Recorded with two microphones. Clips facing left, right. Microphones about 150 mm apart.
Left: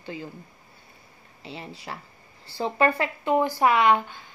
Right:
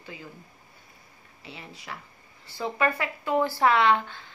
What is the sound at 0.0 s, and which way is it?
Speech, 30° left (ahead or behind).